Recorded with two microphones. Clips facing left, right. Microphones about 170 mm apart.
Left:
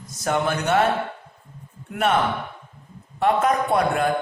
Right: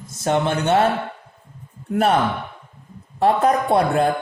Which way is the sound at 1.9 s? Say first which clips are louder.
Right 4 dB; 35° right (ahead or behind).